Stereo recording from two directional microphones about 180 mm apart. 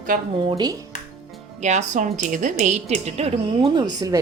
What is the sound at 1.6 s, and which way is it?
A woman's voice, 40° right (ahead or behind).